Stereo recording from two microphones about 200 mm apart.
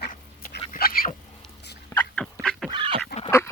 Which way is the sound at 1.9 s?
15° left (ahead or behind).